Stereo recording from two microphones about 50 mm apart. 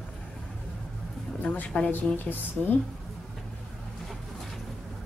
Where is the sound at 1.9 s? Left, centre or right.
Left.